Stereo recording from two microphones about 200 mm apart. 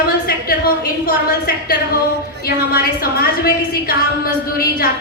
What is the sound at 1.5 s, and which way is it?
A woman's voice, 50° left (ahead or behind).